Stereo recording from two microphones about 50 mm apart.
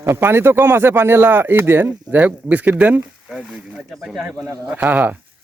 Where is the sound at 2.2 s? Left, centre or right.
Right.